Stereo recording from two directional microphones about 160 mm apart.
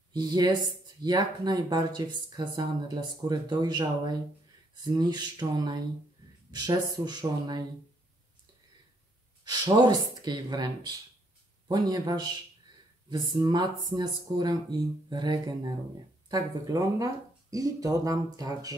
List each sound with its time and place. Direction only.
0.1 s speech: 25° right (ahead or behind)
9.5 s speech: 25° right (ahead or behind)